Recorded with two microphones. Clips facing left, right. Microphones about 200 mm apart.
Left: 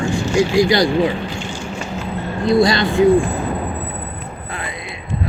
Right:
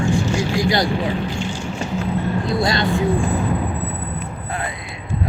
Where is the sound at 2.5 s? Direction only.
80° left.